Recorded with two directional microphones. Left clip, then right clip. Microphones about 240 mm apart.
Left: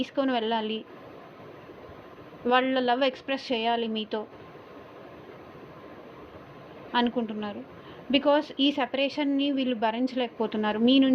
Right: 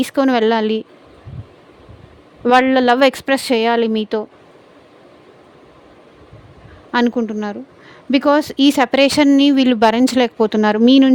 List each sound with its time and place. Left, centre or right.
0.0 s a woman's voice: right
2.4 s speech: right
6.9 s a woman's voice: right